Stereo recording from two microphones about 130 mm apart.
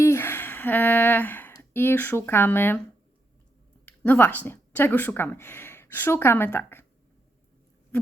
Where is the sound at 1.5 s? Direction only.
20° left (ahead or behind).